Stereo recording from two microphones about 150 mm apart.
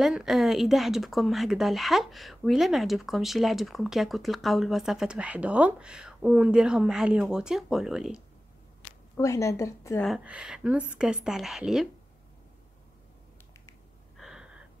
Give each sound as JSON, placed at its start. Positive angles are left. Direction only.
{"t": 0.0, "sound": "speech", "side_deg": -5}
{"t": 9.1, "sound": "a woman's voice", "side_deg": 20}
{"t": 9.9, "sound": "speech", "side_deg": 0}
{"t": 14.1, "sound": "gasp", "side_deg": -5}